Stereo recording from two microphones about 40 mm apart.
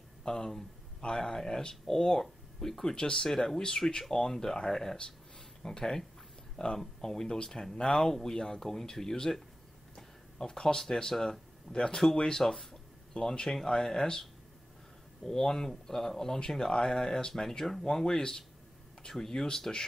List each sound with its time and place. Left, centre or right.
0.2 s speech: centre
11.7 s speech: centre
15.2 s speech: centre